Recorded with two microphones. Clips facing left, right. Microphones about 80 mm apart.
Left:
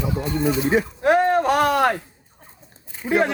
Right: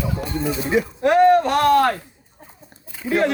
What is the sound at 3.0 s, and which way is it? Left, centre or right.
Speech, centre.